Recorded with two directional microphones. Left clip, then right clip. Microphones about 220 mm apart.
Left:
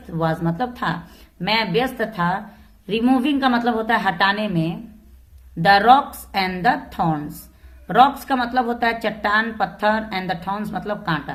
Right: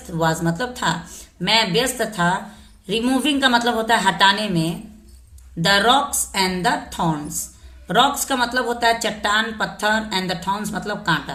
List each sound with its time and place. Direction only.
0.1 s a woman's voice: 15° left (ahead or behind)